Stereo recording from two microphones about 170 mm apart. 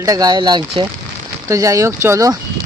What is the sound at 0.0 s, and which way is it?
Speech, 20° right (ahead or behind).